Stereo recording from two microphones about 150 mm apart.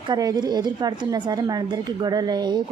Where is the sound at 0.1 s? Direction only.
25° right (ahead or behind).